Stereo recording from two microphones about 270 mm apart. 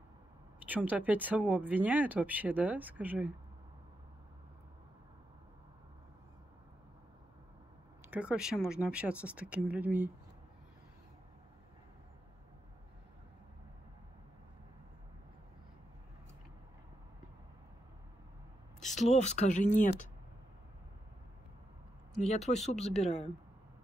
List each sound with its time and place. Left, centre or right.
0.7 s speech: centre
8.1 s speech: centre
18.9 s speech: left
22.3 s speech: left